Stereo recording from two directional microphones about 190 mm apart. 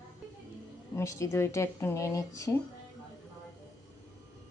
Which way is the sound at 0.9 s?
15° left (ahead or behind).